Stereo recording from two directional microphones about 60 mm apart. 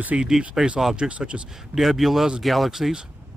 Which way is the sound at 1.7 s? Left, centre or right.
Centre.